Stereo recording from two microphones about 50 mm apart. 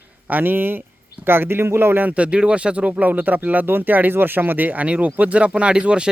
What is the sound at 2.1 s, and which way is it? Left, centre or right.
Speech, right.